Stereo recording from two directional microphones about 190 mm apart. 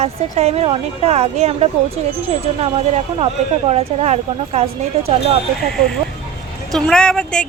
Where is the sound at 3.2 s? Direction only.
30° right (ahead or behind).